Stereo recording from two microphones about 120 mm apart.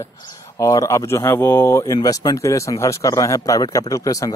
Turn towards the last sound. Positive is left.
turn(degrees=30)  # may be behind; listen again after turning